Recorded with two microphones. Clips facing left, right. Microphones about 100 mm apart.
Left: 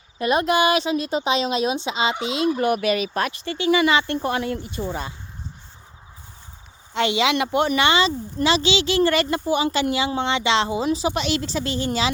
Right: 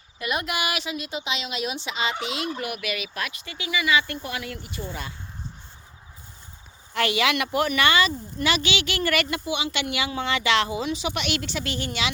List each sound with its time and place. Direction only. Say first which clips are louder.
0.2 s a woman's voice: left 9 dB; 35° left (ahead or behind)
2.6 s a woman's voice: left 10 dB; 35° left (ahead or behind)
6.9 s speech: left 3 dB; 25° left (ahead or behind); by 9.9 s 45° left (ahead or behind)
9.9 s a woman's voice: left 4 dB; 30° left (ahead or behind)